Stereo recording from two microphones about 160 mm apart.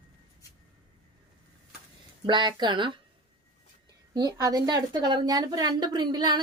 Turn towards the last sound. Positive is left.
turn(degrees=-25)  # may be behind; listen again after turning